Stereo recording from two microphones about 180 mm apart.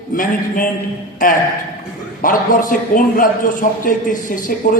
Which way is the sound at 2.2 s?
50° left (ahead or behind).